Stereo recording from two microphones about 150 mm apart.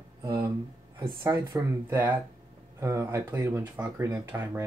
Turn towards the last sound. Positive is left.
turn(degrees=-15)  # may be behind; listen again after turning